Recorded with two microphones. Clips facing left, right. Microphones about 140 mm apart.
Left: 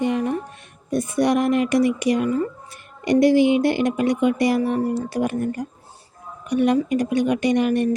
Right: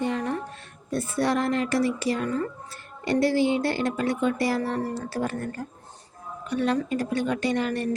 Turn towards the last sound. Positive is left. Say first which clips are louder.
# left 7 dB
turn(degrees=15)  # may be behind; listen again after turning